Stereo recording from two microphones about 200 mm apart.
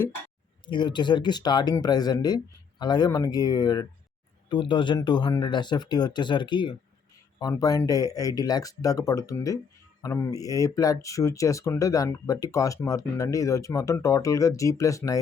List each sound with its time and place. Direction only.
0.7 s speech: 25° left (ahead or behind)